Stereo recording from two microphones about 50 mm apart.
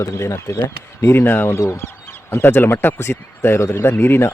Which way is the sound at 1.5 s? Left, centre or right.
Left.